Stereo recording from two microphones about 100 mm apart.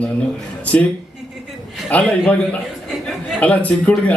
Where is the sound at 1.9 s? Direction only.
15° left (ahead or behind).